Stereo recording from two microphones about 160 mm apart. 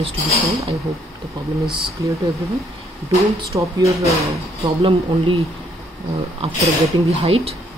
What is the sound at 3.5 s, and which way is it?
Speech, 20° right (ahead or behind).